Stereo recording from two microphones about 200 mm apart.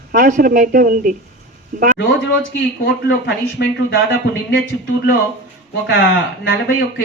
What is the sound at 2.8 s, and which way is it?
Speech, 55° left (ahead or behind).